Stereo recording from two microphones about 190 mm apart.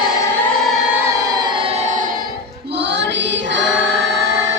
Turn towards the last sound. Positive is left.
turn(degrees=-75)  # may be behind; listen again after turning